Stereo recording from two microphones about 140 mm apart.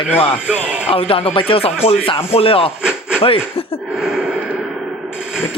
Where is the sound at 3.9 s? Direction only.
5° right (ahead or behind).